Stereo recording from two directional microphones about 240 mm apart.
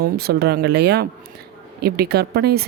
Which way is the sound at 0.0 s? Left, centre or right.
Right.